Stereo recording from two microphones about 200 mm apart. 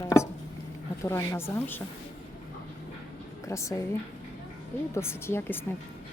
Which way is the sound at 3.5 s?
15° left (ahead or behind).